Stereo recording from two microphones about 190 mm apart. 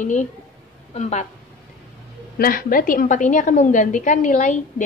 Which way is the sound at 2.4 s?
50° left (ahead or behind).